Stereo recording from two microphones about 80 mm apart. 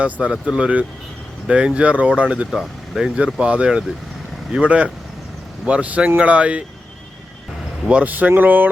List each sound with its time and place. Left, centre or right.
0.0 s speech: centre
2.5 s speech: centre
3.3 s speech: centre
7.9 s speech: centre